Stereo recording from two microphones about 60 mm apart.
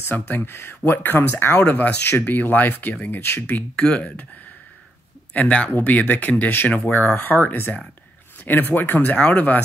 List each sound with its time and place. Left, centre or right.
0.1 s speech: left
3.2 s speech: left
3.4 s speech: left
5.3 s speech: left